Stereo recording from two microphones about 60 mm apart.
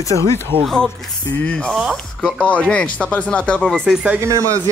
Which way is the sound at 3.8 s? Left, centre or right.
Centre.